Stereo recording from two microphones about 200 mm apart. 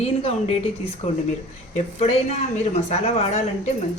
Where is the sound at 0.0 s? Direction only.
30° left (ahead or behind).